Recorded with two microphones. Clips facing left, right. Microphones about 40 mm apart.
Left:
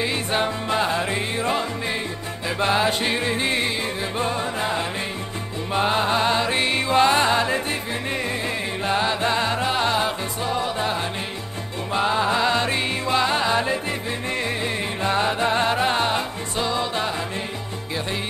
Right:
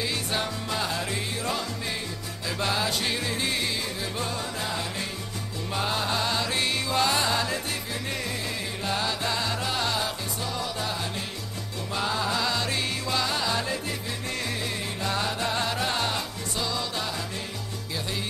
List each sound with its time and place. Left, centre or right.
0.0 s music: left
2.6 s music: left
8.8 s music: left